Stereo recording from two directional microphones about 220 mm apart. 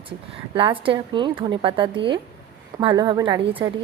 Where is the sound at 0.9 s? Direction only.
20° right (ahead or behind).